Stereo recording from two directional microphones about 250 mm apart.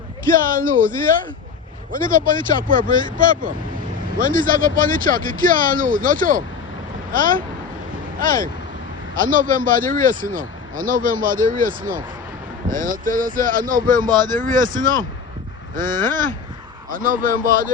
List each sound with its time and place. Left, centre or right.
0.5 s speech: right